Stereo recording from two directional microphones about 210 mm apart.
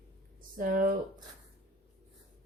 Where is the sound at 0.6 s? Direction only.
40° right (ahead or behind).